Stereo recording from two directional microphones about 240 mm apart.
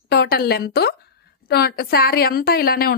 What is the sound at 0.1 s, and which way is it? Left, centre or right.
A woman's voice, left.